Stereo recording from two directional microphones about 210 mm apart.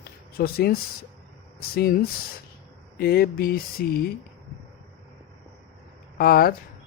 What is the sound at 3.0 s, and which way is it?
Speech, 45° left (ahead or behind).